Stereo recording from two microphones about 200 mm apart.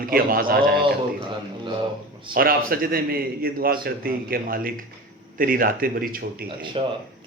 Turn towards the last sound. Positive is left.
turn(degrees=-25)  # may be behind; listen again after turning